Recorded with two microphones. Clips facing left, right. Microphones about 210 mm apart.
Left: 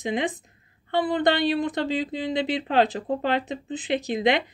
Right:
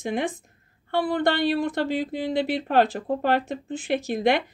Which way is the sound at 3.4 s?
20° left (ahead or behind).